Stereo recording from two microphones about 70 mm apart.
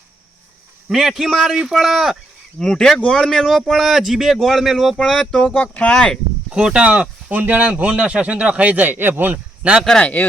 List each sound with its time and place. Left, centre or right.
0.9 s a man's voice: centre
2.6 s a man's voice: centre
5.5 s speech: left
5.9 s speech: centre
6.5 s speech: centre
10.0 s speech: left